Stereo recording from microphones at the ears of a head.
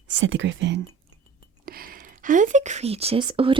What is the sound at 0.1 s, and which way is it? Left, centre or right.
Speech, right.